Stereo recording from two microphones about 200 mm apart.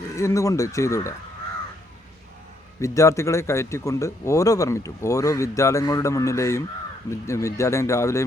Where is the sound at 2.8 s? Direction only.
15° left (ahead or behind).